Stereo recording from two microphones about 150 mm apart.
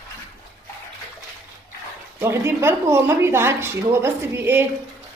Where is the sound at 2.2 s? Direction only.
15° right (ahead or behind).